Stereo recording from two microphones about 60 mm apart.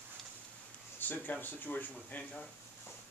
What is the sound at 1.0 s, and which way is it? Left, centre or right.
Speech, left.